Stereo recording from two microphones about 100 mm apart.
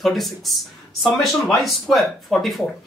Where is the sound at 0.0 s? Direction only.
Centre (ahead or behind).